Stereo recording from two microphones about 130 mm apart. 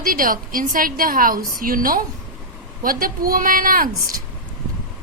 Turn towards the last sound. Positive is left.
turn(degrees=-90)